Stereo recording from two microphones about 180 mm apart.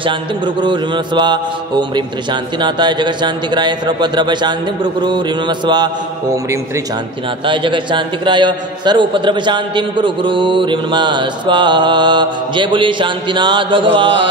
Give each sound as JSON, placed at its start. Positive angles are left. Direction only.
{"t": 0.0, "sound": "a man's voice", "side_deg": -25}
{"t": 7.4, "sound": "a man's voice", "side_deg": -25}